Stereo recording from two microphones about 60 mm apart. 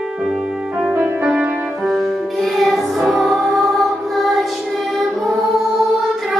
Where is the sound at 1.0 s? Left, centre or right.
Right.